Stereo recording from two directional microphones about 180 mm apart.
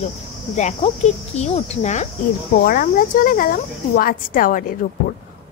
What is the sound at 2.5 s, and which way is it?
A woman's voice, 55° left (ahead or behind).